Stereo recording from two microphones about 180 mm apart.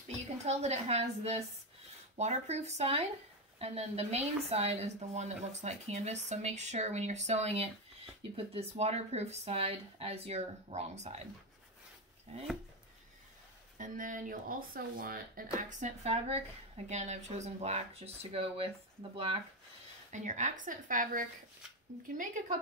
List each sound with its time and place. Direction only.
0.4 s speech: 35° right (ahead or behind)
13.7 s speech: 45° right (ahead or behind)
15.5 s speech: 40° right (ahead or behind)
20.1 s speech: 45° right (ahead or behind)